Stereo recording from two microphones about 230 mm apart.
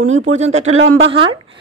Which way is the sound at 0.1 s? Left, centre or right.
Right.